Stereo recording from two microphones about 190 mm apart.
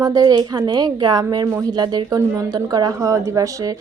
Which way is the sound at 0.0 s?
20° right (ahead or behind).